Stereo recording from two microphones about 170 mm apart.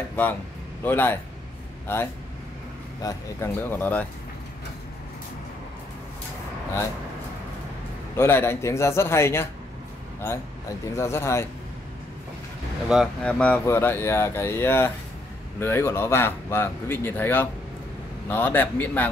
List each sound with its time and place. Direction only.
0.1 s a sound: 10° left (ahead or behind)
0.8 s speech: 10° left (ahead or behind)
3.0 s speech: 15° left (ahead or behind)
8.2 s speech: 15° left (ahead or behind)
11.0 s speech: 15° left (ahead or behind)
12.8 s speech: centre (ahead or behind)